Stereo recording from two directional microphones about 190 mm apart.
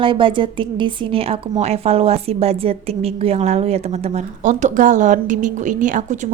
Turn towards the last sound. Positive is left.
turn(degrees=-40)  # may be behind; listen again after turning